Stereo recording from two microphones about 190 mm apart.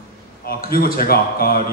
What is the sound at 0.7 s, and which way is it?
Speech, 50° left (ahead or behind).